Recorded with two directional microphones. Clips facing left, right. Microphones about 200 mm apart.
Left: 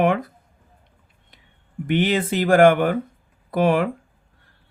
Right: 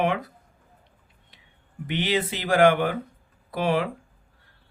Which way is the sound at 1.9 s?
50° left (ahead or behind).